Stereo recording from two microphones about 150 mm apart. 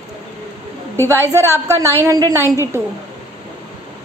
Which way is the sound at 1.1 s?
15° right (ahead or behind).